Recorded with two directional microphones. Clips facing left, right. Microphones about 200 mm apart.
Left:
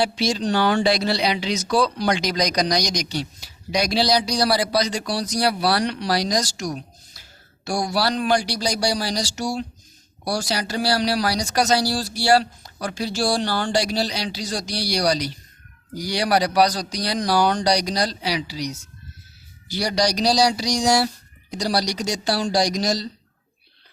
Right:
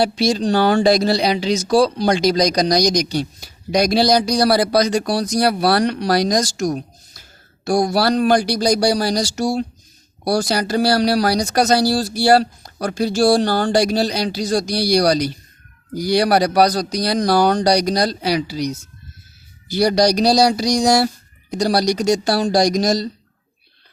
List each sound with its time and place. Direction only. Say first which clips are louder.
0.0 s speech: right 5 dB; 40° right (ahead or behind)